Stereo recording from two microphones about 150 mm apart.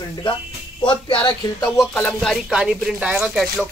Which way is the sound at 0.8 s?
35° left (ahead or behind).